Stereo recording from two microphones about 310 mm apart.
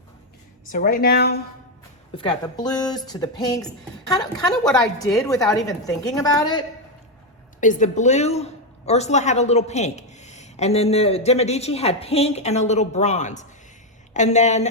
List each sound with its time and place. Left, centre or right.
0.7 s speech: left
2.1 s a woman's voice: centre
7.6 s speech: left